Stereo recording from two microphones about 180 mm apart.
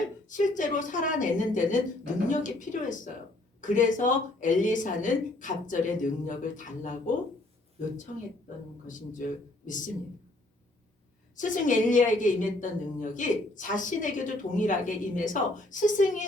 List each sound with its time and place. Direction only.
0.3 s a woman's voice: 45° left (ahead or behind)
8.9 s a woman's voice: 45° left (ahead or behind)
11.3 s a woman's voice: 45° left (ahead or behind)